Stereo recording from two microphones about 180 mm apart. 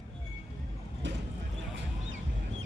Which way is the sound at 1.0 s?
80° right.